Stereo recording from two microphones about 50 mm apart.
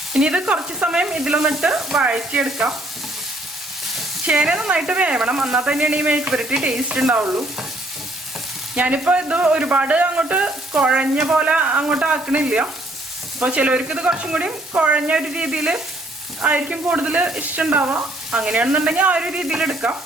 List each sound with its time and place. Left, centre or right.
0.1 s speech: centre
1.7 s sizzle: centre
2.1 s speech: centre
4.3 s speech: centre
6.3 s speech: centre
8.7 s speech: right
17.7 s stir: right
18.3 s stir: centre
18.5 s speech: right